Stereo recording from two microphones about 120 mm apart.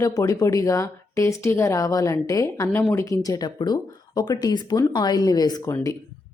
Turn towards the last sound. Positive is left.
turn(degrees=30)  # may be behind; listen again after turning